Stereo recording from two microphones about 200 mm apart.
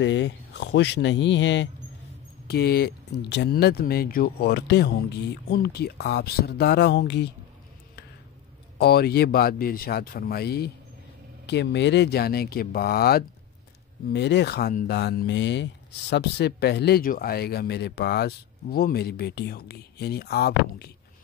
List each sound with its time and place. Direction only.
0.0 s speech: 65° left (ahead or behind)
2.4 s speech: 55° left (ahead or behind)
8.7 s speech: 55° left (ahead or behind)